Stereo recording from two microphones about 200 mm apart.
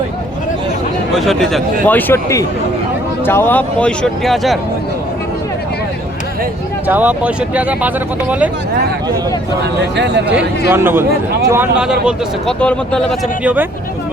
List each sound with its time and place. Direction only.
1.2 s speech: centre (ahead or behind)
6.8 s speech: 10° right (ahead or behind)
9.9 s a man's voice: 60° right (ahead or behind)
10.7 s speech: 10° right (ahead or behind); by 13.1 s 5° left (ahead or behind)
13.4 s speech: 5° right (ahead or behind)